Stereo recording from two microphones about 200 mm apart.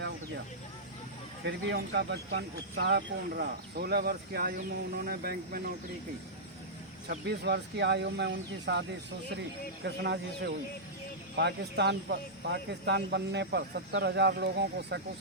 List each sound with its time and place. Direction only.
1.5 s speech: 60° right (ahead or behind)
7.1 s speech: 55° right (ahead or behind)
9.8 s speech: 55° right (ahead or behind)